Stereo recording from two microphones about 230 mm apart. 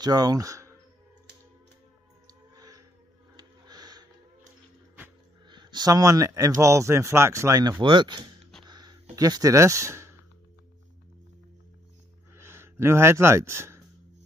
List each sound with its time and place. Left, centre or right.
0.0 s speech: centre
2.2 s a sound: centre
5.5 s speech: centre
8.6 s a sound: centre
9.1 s speech: centre
12.4 s speech: centre